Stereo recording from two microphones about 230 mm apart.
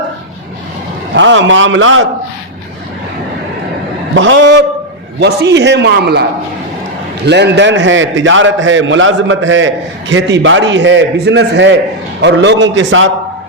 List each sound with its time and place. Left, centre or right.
1.1 s a man's voice: right
4.1 s a man's voice: right
7.3 s a man's voice: right